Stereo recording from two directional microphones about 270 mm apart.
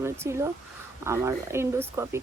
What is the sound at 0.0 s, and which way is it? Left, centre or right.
A woman's voice, centre.